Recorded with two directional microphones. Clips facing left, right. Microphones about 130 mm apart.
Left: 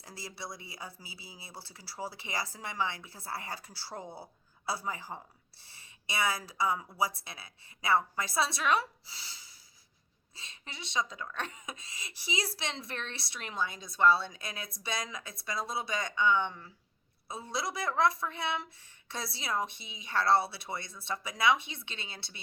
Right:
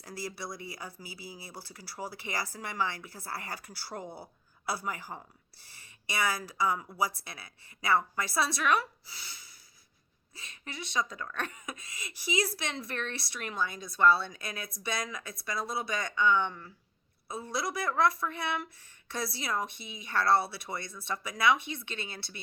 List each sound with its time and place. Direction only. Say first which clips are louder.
0.0 s speech: right 4 dB; 25° left (ahead or behind)